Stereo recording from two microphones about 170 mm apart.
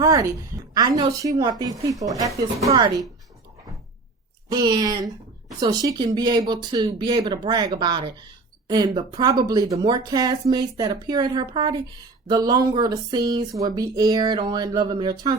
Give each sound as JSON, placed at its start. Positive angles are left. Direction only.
{"t": 0.0, "sound": "a woman's voice", "side_deg": -20}
{"t": 4.4, "sound": "speech", "side_deg": -25}